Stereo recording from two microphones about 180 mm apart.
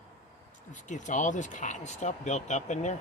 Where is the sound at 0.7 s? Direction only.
45° left (ahead or behind).